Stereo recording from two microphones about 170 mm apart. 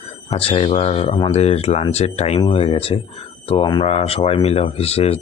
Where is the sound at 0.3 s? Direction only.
35° left (ahead or behind).